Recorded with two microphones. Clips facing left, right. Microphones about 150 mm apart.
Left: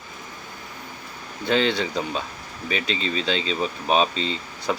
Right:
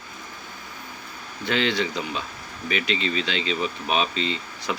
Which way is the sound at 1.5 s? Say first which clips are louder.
Left 2 dB; 35° left (ahead or behind).